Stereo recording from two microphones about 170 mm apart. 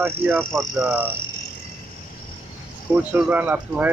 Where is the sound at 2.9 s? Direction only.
10° right (ahead or behind).